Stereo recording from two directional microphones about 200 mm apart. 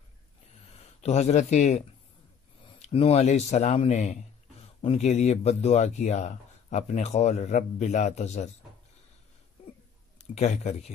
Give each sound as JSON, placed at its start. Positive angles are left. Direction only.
{"t": 0.7, "sound": "speech", "side_deg": 35}
{"t": 9.6, "sound": "a sound", "side_deg": 30}
{"t": 10.1, "sound": "a man's voice", "side_deg": 35}